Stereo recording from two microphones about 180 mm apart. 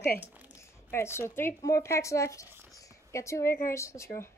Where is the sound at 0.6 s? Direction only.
15° left (ahead or behind).